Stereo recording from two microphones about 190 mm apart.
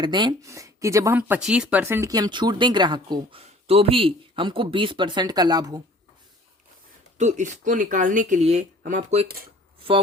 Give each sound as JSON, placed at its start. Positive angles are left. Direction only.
{"t": 0.0, "sound": "speech", "side_deg": -25}
{"t": 7.2, "sound": "speech", "side_deg": -40}